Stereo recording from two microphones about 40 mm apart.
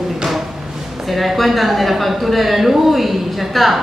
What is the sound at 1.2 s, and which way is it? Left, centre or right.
A woman's voice, centre.